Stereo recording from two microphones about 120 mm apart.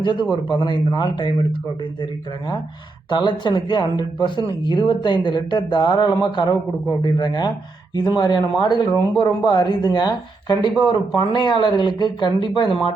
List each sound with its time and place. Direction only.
0.0 s speech: 40° left (ahead or behind)
3.1 s speech: 40° left (ahead or behind)